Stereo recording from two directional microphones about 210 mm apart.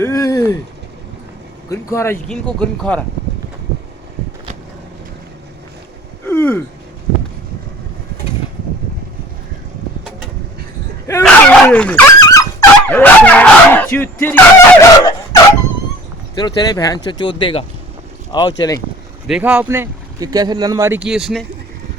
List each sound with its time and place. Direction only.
0.0 s a sound: 15° left (ahead or behind)
1.7 s speech: 15° left (ahead or behind)
6.2 s gasp: 10° left (ahead or behind)
11.2 s dog: 5° left (ahead or behind)
16.3 s speech: 20° left (ahead or behind)
19.3 s speech: 5° right (ahead or behind)